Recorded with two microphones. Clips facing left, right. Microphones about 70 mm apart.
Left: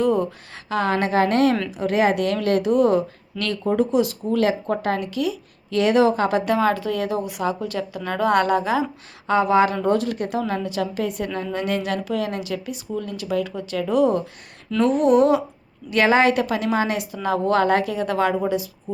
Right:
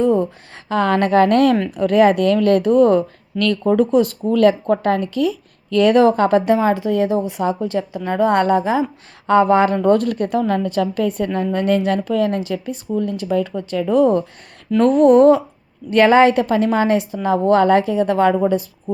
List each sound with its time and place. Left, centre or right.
0.0 s a sound: right
0.9 s a woman's voice: right
6.4 s a woman's voice: right
9.2 s a woman's voice: right